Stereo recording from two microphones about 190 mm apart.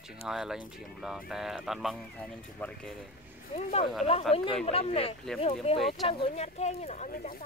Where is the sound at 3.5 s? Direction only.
30° left (ahead or behind).